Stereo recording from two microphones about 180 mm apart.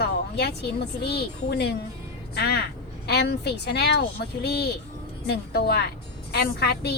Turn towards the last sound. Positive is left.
turn(degrees=65)  # may be behind; listen again after turning